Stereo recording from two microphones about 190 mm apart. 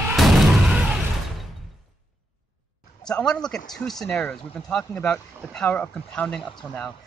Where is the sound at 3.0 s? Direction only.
5° left (ahead or behind).